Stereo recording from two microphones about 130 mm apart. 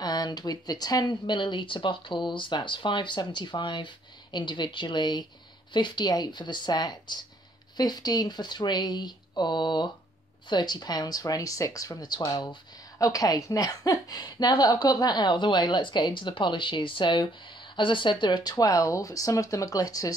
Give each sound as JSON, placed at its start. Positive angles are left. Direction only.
{"t": 0.0, "sound": "speech", "side_deg": 30}